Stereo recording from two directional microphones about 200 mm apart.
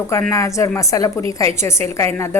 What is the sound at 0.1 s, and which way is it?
A woman's voice, 15° left (ahead or behind).